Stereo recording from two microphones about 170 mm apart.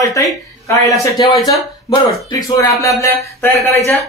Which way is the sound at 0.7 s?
20° left (ahead or behind).